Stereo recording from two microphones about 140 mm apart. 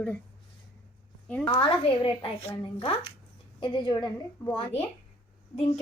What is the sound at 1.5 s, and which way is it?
A woman's voice, 40° left (ahead or behind).